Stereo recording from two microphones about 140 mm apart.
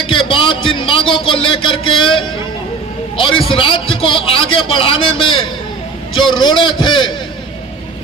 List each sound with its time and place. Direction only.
0.0 s music: 35° left (ahead or behind)
1.1 s a man's voice: 35° left (ahead or behind)